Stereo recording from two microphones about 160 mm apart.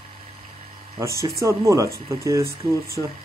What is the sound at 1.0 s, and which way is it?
Speech, 20° right (ahead or behind).